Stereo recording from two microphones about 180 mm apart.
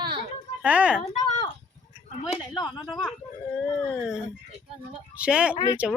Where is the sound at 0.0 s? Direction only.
30° right (ahead or behind).